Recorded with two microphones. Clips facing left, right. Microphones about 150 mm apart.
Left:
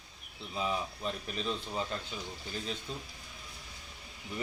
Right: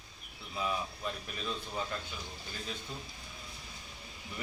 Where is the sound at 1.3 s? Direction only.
20° left (ahead or behind).